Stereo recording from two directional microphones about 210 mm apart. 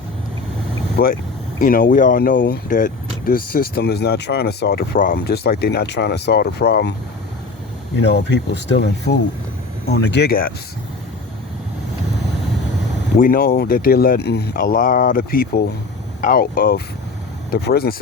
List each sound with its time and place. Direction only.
0.9 s speech: 45° left (ahead or behind)
7.9 s speech: 55° left (ahead or behind)
13.1 s speech: 40° left (ahead or behind)